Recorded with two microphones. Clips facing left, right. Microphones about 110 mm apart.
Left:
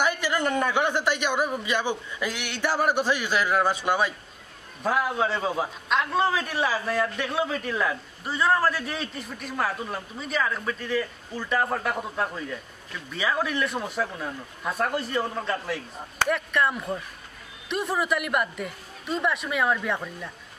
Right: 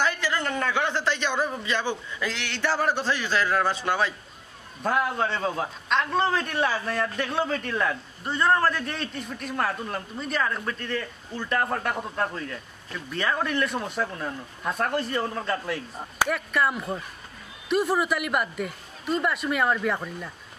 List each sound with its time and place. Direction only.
0.0 s a man's voice: 15° left (ahead or behind)